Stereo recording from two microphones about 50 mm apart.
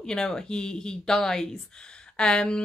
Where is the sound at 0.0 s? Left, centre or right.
Centre.